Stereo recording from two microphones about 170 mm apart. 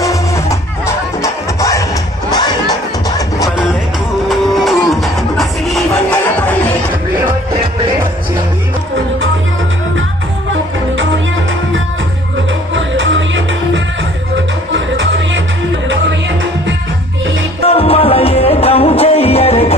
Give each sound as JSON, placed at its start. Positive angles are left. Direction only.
{"t": 0.0, "sound": "music", "side_deg": 20}
{"t": 2.3, "sound": "crowd", "side_deg": 25}
{"t": 4.3, "sound": "music", "side_deg": 0}
{"t": 12.7, "sound": "music", "side_deg": -90}
{"t": 17.7, "sound": "music", "side_deg": 35}